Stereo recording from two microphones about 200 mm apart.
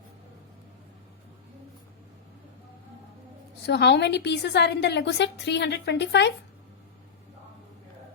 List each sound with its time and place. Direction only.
3.7 s a woman's voice: 55° left (ahead or behind)